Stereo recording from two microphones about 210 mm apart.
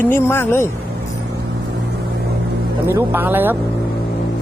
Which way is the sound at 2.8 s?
10° right (ahead or behind).